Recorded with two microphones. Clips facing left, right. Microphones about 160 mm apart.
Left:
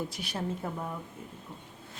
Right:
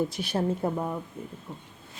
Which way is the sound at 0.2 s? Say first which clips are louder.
Right 7 dB; 35° right (ahead or behind).